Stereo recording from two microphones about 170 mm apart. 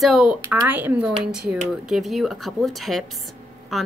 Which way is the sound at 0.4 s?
15° right (ahead or behind).